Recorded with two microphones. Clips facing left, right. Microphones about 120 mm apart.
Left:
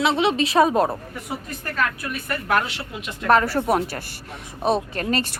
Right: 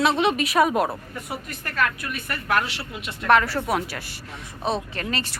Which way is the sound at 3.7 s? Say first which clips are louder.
Left 4 dB; 35° left (ahead or behind).